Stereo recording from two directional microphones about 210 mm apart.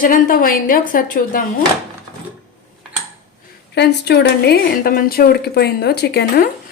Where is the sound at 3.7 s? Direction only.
50° left (ahead or behind).